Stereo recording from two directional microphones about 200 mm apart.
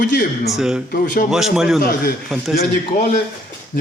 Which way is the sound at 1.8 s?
50° left (ahead or behind).